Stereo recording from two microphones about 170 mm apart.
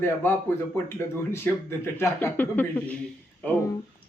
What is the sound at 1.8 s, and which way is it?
Speech, 15° left (ahead or behind).